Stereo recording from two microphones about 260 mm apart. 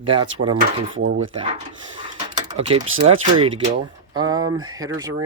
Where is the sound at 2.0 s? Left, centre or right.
Centre.